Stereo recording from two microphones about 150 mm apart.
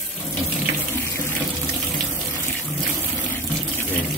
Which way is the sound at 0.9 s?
15° left (ahead or behind).